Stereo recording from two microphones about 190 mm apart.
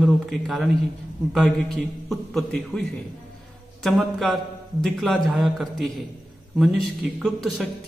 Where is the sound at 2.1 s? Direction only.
Centre (ahead or behind).